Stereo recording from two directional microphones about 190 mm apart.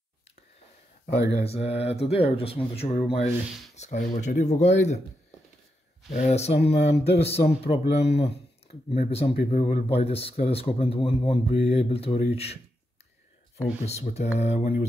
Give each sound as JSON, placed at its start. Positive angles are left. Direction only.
{"t": 1.4, "sound": "speech", "side_deg": 30}
{"t": 6.1, "sound": "speech", "side_deg": 35}
{"t": 7.8, "sound": "speech", "side_deg": 60}
{"t": 8.2, "sound": "speech", "side_deg": 30}
{"t": 13.8, "sound": "speech", "side_deg": 35}